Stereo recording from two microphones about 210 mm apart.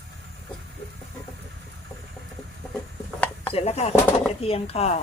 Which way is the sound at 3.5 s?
30° left (ahead or behind).